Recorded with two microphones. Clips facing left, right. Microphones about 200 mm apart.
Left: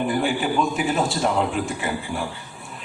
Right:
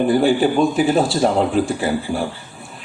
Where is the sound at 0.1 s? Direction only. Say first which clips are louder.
Right 7 dB; 35° right (ahead or behind).